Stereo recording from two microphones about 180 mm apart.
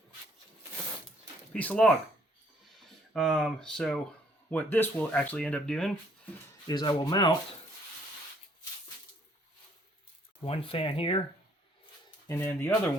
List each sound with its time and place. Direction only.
1.5 s speech: 10° left (ahead or behind)
6.7 s speech: 20° left (ahead or behind)
10.4 s speech: 30° left (ahead or behind)
12.3 s speech: 10° left (ahead or behind)